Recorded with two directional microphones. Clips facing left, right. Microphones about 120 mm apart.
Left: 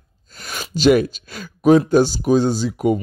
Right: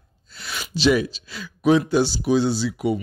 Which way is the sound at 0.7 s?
50° left (ahead or behind).